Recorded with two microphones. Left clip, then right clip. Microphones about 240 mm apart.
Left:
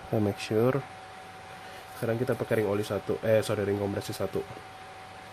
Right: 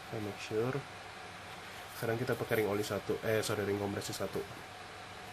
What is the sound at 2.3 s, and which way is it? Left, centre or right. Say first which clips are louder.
Speech: left 5 dB; left.